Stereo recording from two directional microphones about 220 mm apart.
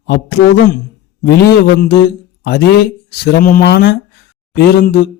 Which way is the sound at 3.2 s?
40° left (ahead or behind).